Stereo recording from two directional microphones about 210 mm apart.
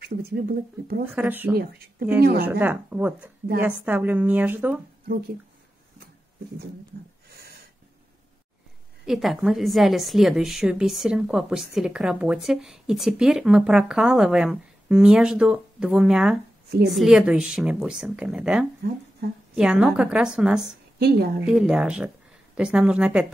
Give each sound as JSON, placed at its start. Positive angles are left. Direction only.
{"t": 0.0, "sound": "speech", "side_deg": -50}
{"t": 1.0, "sound": "a woman's voice", "side_deg": -10}
{"t": 1.5, "sound": "speech", "side_deg": -45}
{"t": 2.6, "sound": "a woman's voice", "side_deg": -10}
{"t": 6.9, "sound": "speech", "side_deg": -50}
{"t": 9.0, "sound": "a woman's voice", "side_deg": 0}
{"t": 21.0, "sound": "speech", "side_deg": -50}
{"t": 21.5, "sound": "a woman's voice", "side_deg": -5}